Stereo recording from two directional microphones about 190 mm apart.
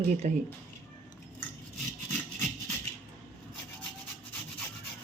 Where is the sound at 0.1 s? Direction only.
40° right (ahead or behind).